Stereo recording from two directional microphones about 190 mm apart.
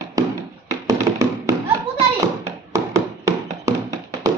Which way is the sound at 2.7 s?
15° right (ahead or behind).